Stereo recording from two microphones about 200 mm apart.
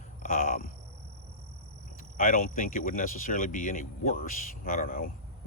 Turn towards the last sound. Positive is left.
turn(degrees=45)  # may be behind; listen again after turning